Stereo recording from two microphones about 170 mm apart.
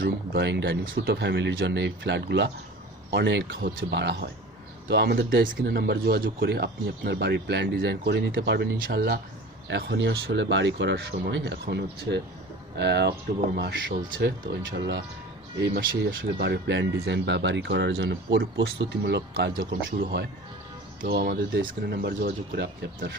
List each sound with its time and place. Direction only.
0.0 s speech: 80° right
9.6 s speech: 90° right
14.2 s speech: 70° right (ahead or behind)